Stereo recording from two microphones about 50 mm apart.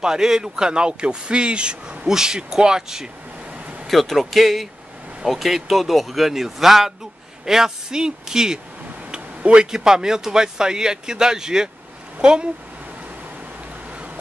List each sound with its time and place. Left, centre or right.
0.0 s speech: centre
3.8 s speech: centre